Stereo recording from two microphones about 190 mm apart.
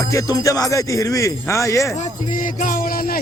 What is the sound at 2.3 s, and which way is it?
Music, 45° left (ahead or behind).